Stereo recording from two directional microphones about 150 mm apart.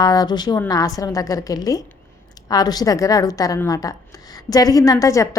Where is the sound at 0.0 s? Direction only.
25° left (ahead or behind).